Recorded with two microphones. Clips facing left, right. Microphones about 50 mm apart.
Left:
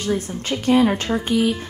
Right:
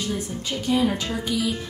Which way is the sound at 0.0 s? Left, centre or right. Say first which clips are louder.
Left 5 dB; left.